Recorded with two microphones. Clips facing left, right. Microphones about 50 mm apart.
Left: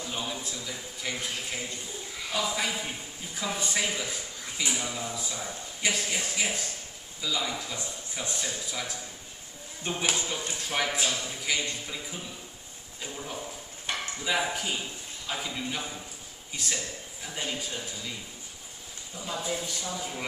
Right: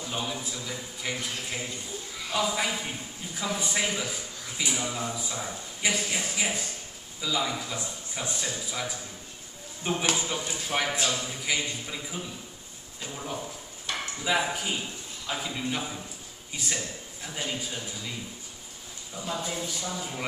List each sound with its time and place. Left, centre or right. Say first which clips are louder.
0.0 s a man's voice: right 2 dB; centre
1.2 s speech: even; centre
2.3 s a man's voice: right 2 dB; centre
9.8 s speech: right 2 dB; centre
10.2 s a man's voice: right 2 dB; centre
10.7 s a man's voice: right 1 dB; centre
13.9 s a sound: even; left
14.2 s speech: right 2 dB; centre
19.2 s speech: even; centre